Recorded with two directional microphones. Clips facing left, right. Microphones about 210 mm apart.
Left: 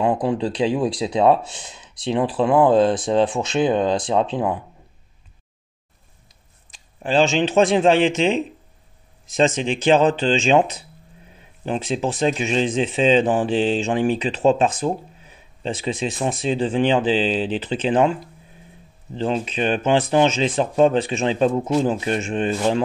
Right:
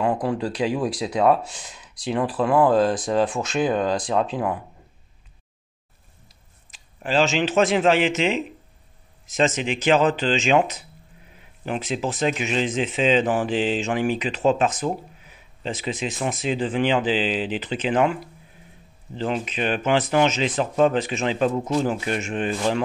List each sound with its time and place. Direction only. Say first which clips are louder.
0.0 s speech: left 3 dB; 20° left (ahead or behind)
7.0 s speech: left 3 dB; 30° left (ahead or behind)
9.7 s speech: left 3 dB; 30° left (ahead or behind)
19.1 s speech: left 3 dB; 30° left (ahead or behind)